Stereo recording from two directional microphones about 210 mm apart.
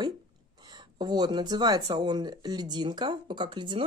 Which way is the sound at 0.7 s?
20° right (ahead or behind).